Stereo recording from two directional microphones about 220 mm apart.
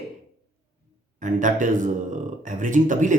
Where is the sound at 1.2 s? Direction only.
35° right (ahead or behind).